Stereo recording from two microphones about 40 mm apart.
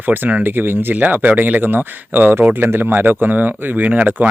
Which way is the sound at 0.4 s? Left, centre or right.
Right.